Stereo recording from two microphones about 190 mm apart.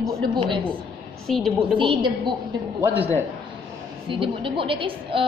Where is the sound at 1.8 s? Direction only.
25° right (ahead or behind).